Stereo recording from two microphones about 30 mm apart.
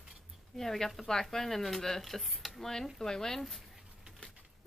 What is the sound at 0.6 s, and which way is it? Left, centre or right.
A woman's voice, centre.